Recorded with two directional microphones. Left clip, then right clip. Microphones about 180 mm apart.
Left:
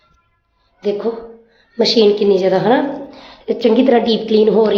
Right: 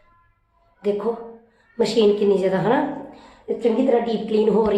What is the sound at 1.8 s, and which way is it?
A woman's voice, 25° left (ahead or behind).